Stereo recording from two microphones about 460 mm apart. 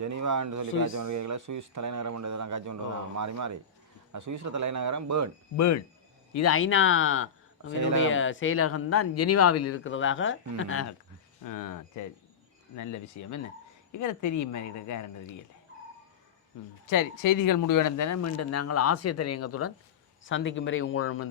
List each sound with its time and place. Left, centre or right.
0.0 s speech: right
5.5 s speech: left
7.7 s speech: right
7.9 s speech: left
11.4 s speech: left
16.8 s speech: left